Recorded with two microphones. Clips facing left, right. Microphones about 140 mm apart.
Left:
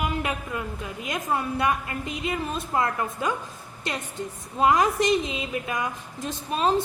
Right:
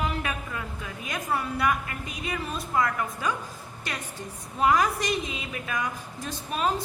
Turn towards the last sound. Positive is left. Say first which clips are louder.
# left 4 dB
turn(degrees=25)  # may be behind; listen again after turning